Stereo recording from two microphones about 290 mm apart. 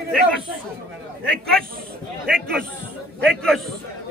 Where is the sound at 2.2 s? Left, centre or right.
Right.